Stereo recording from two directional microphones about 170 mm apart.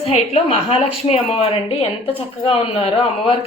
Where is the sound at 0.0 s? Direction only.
35° left (ahead or behind).